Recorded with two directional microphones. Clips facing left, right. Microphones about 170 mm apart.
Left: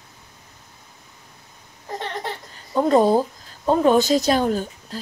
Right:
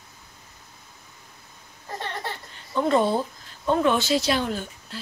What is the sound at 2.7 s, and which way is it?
A woman's voice, 40° left (ahead or behind).